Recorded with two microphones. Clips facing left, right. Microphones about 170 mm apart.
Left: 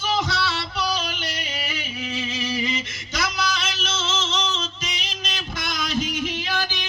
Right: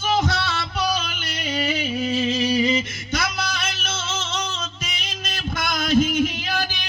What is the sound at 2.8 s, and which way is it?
Music, 55° right (ahead or behind).